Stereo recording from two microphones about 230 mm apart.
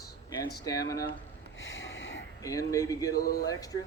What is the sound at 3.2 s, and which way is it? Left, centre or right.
Speech, left.